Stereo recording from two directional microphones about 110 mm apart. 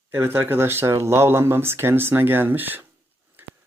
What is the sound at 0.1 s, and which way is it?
Speech, 20° right (ahead or behind).